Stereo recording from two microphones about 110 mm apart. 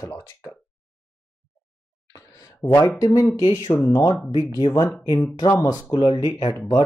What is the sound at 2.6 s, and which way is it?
Speech, 40° left (ahead or behind).